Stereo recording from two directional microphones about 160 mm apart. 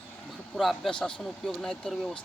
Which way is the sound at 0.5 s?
Centre (ahead or behind).